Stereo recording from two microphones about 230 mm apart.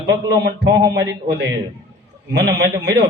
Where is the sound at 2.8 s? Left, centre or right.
Right.